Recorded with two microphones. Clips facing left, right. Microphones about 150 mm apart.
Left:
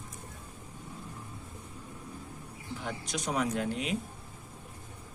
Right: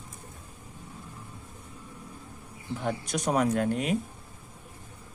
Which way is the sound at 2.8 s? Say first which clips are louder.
Right 6 dB; 50° right (ahead or behind).